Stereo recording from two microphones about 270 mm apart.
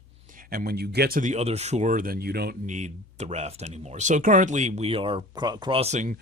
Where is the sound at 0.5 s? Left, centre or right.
Right.